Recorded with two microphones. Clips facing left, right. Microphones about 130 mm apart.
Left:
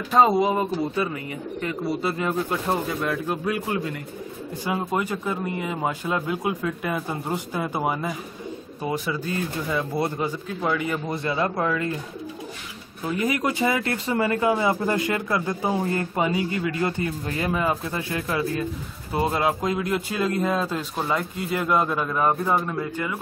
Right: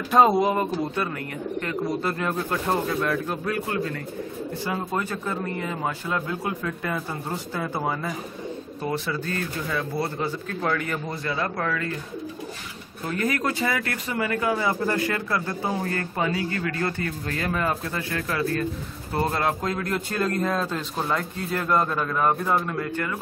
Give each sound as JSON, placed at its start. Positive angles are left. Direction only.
{"t": 0.1, "sound": "speech", "side_deg": 0}
{"t": 11.2, "sound": "speech", "side_deg": 20}
{"t": 13.0, "sound": "speech", "side_deg": 10}